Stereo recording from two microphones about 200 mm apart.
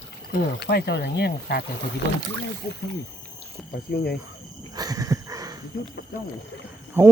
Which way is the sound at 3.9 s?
50° left (ahead or behind).